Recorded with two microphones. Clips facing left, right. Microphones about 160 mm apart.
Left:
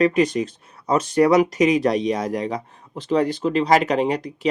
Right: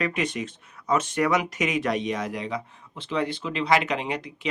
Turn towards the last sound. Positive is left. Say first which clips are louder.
# left 9 dB
turn(degrees=40)  # may be behind; listen again after turning